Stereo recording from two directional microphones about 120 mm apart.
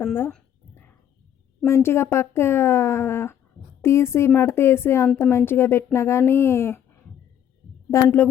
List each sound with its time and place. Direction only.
1.6 s speech: 20° left (ahead or behind)
7.9 s speech: 25° left (ahead or behind)